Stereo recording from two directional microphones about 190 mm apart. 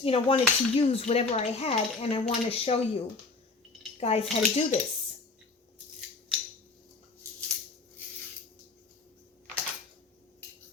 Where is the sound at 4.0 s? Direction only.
35° left (ahead or behind).